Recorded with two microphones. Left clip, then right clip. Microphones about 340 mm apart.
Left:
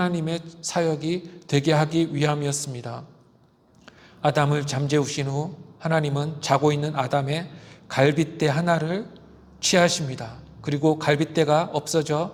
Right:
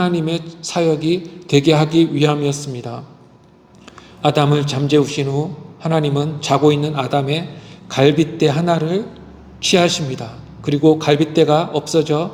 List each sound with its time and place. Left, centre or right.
0.0 s a man's voice: left
4.2 s a man's voice: left